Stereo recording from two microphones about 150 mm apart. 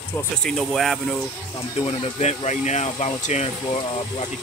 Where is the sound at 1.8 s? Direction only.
45° left (ahead or behind).